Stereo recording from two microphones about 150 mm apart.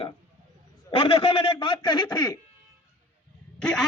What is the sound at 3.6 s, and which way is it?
Speech, 5° left (ahead or behind).